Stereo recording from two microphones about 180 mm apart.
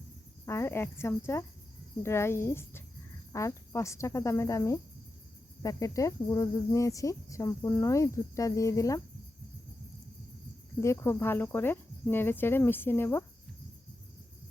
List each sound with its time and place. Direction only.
0.4 s cricket: 15° left (ahead or behind)
10.8 s cricket: 15° left (ahead or behind)